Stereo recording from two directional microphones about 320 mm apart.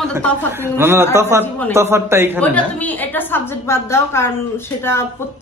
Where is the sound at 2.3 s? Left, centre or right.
Centre.